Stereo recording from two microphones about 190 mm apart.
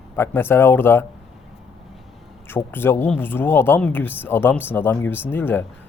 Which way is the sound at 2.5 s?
10° left (ahead or behind).